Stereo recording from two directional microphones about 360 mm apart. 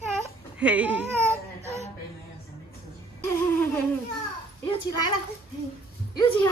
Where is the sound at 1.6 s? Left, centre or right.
Centre.